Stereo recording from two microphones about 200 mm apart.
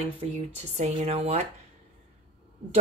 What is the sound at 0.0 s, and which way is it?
A woman's voice, 30° right (ahead or behind).